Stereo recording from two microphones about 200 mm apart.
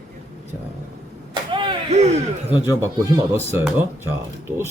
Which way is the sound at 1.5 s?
25° right (ahead or behind).